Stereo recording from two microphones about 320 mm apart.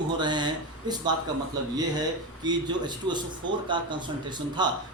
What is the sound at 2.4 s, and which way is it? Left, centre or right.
A man's voice, centre.